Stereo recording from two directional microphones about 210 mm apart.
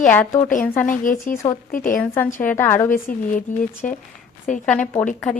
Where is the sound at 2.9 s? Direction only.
40° left (ahead or behind).